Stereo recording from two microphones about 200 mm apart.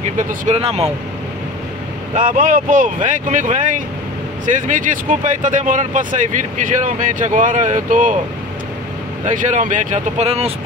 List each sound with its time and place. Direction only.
0.2 s speech: 35° right (ahead or behind)
2.1 s speech: 40° right (ahead or behind)
9.2 s speech: 40° right (ahead or behind)